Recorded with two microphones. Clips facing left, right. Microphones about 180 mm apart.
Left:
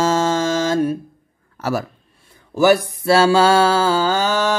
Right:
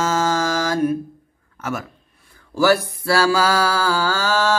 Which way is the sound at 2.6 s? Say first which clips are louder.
Left 3 dB; 20° left (ahead or behind).